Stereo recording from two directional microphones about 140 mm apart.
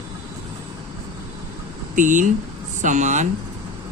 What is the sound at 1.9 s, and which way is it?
Speech, 65° right (ahead or behind).